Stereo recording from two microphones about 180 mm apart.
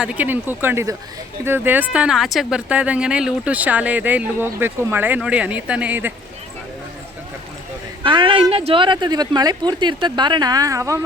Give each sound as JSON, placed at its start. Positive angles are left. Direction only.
{"t": 0.0, "sound": "speech", "side_deg": -10}
{"t": 8.0, "sound": "speech", "side_deg": -25}